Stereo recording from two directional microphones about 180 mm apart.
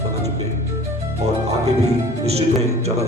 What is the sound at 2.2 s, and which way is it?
Speech, 35° right (ahead or behind).